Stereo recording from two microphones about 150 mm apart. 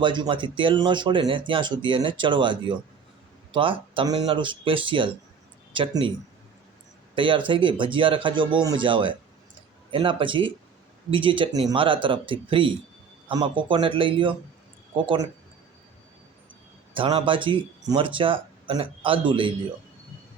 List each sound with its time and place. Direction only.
0.0 s speech: 30° right (ahead or behind)
7.2 s speech: 35° right (ahead or behind)
16.9 s speech: 35° right (ahead or behind)